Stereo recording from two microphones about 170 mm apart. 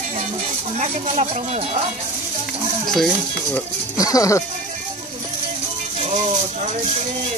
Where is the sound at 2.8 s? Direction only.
Centre (ahead or behind).